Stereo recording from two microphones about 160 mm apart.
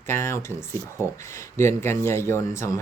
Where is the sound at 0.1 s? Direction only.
15° left (ahead or behind).